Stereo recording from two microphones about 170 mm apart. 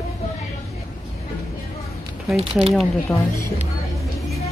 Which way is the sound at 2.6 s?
5° right (ahead or behind).